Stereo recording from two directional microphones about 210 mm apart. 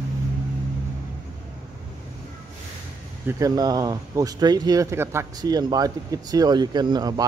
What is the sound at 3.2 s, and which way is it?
Speech, 15° right (ahead or behind).